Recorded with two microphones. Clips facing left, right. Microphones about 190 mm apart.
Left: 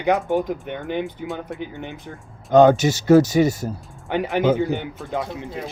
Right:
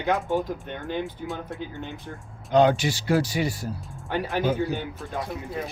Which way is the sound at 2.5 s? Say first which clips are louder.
Left 6 dB; 45° left (ahead or behind).